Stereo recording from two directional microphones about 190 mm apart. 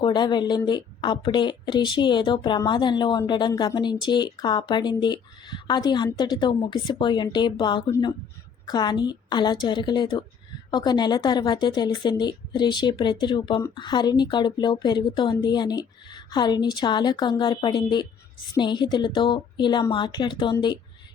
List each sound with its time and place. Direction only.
0.0 s a woman's voice: 25° left (ahead or behind)